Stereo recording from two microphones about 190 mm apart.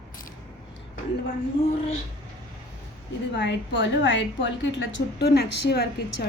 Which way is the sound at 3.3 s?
65° left (ahead or behind).